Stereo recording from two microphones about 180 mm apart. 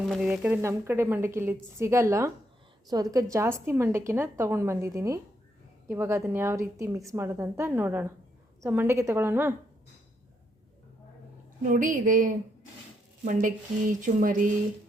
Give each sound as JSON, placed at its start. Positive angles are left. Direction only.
{"t": 0.1, "sound": "a woman's voice", "side_deg": -5}
{"t": 11.6, "sound": "speech", "side_deg": -45}